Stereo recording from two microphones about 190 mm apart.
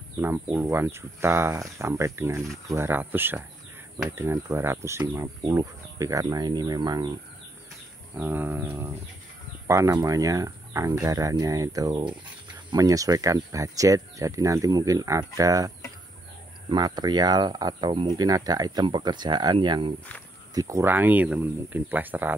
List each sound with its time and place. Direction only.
0.2 s speech: 10° right (ahead or behind)
8.2 s speech: 10° right (ahead or behind)